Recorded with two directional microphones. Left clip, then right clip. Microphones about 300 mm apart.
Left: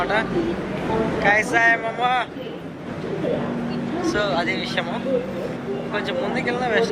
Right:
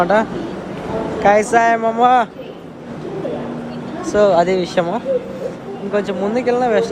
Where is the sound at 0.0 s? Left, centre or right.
Right.